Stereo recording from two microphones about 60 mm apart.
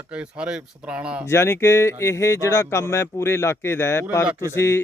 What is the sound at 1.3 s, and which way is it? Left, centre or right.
Speech, left.